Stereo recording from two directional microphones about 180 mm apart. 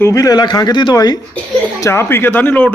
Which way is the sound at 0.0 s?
20° left (ahead or behind).